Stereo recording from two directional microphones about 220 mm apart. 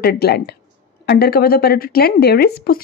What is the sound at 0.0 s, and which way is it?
Speech, 45° left (ahead or behind).